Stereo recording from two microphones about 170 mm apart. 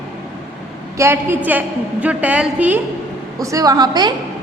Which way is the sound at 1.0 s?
15° right (ahead or behind).